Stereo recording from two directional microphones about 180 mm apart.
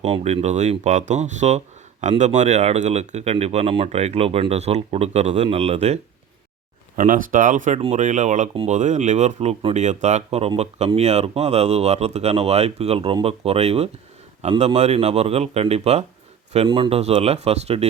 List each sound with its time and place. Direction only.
0.0 s speech: 35° right (ahead or behind)
6.9 s speech: 50° right (ahead or behind)